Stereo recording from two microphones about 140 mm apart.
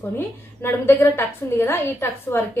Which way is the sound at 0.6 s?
15° left (ahead or behind).